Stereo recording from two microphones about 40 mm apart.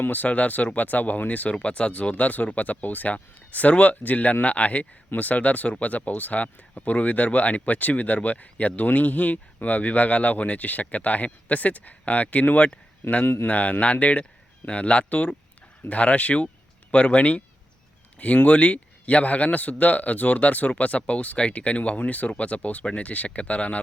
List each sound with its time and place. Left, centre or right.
0.0 s speech: left
13.2 s a man's voice: left
13.5 s speech: left
18.4 s speech: left